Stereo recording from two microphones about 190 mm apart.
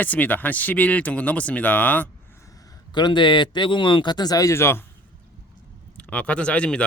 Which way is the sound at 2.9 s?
25° left (ahead or behind).